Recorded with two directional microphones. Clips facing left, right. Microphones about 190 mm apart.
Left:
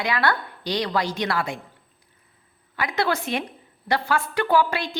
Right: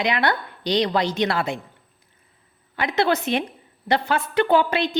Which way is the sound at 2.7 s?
25° right (ahead or behind).